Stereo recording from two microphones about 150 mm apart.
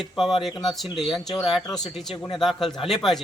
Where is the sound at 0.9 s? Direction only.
Centre (ahead or behind).